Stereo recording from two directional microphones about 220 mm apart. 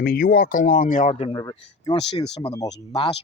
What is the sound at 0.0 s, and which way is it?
Speech, 40° left (ahead or behind).